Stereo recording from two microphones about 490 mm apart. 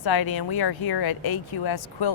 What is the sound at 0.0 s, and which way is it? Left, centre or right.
Speech, left.